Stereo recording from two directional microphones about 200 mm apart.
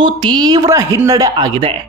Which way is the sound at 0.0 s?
25° right (ahead or behind).